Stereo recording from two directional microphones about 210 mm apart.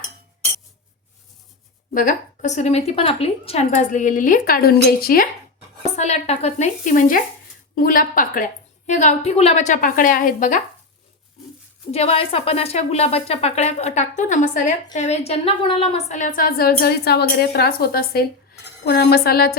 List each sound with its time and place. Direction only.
1.9 s a woman's voice: 40° left (ahead or behind)
5.8 s a woman's voice: 30° left (ahead or behind)
11.9 s a woman's voice: 30° left (ahead or behind); by 19.5 s 45° left (ahead or behind)